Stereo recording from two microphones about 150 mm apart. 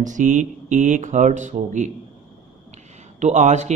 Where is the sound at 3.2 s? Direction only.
50° right (ahead or behind).